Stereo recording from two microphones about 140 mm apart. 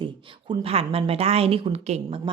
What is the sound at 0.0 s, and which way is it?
Speech, 35° right (ahead or behind).